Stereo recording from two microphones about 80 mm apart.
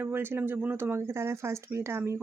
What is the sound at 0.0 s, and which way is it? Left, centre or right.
Speech, right.